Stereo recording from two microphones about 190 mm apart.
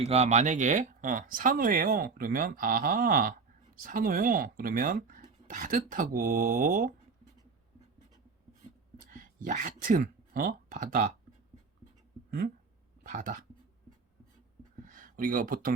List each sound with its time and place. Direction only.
0.0 s speech: 35° right (ahead or behind)
9.1 s speech: 45° right (ahead or behind)
13.0 s speech: 45° right (ahead or behind)
14.8 s a sound: 45° right (ahead or behind)